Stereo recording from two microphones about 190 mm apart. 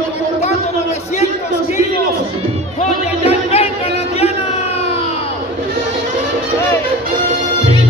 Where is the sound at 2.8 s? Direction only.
30° left (ahead or behind).